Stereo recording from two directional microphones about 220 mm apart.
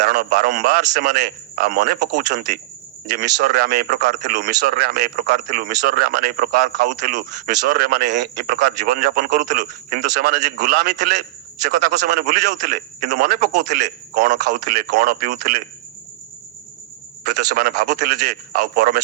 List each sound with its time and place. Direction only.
0.1 s a man's voice: 45° right (ahead or behind)
17.5 s a man's voice: 40° right (ahead or behind)